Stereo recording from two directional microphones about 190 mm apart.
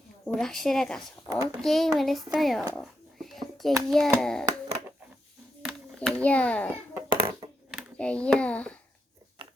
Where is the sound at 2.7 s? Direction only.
Centre (ahead or behind).